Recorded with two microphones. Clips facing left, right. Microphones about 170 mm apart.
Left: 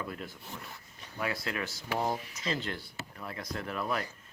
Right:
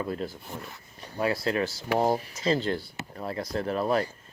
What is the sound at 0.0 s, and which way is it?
Speech, 30° right (ahead or behind).